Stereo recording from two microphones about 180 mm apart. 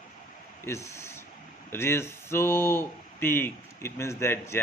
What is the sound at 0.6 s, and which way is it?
Speech, 15° left (ahead or behind).